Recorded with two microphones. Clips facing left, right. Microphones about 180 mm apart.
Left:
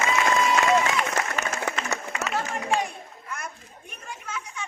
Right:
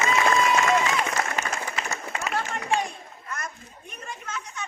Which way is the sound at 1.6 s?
65° left (ahead or behind).